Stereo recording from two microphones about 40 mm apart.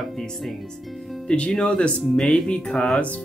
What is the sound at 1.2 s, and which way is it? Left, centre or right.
Speech, left.